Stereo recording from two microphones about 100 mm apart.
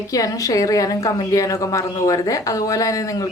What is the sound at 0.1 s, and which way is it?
Speech, 35° left (ahead or behind).